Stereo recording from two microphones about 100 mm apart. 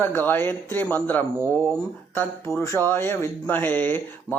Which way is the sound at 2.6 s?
25° left (ahead or behind).